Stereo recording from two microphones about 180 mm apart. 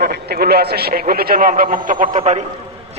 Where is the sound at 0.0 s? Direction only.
60° right (ahead or behind).